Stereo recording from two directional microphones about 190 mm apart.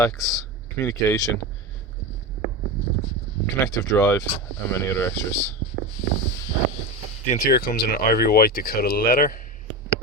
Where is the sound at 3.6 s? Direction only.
15° left (ahead or behind).